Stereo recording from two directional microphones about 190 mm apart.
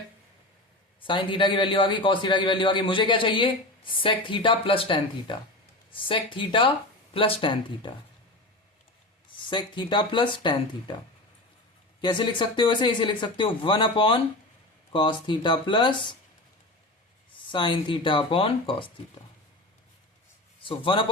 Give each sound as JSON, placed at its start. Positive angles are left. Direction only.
{"t": 1.0, "sound": "a man's voice", "side_deg": 25}
{"t": 9.4, "sound": "a man's voice", "side_deg": 25}
{"t": 12.0, "sound": "a man's voice", "side_deg": 25}
{"t": 17.4, "sound": "a man's voice", "side_deg": 25}
{"t": 20.7, "sound": "a man's voice", "side_deg": 25}